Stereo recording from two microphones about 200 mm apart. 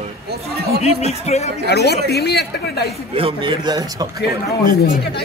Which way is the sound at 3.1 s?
25° right (ahead or behind).